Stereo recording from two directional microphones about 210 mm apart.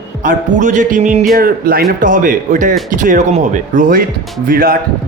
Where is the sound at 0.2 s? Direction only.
35° right (ahead or behind).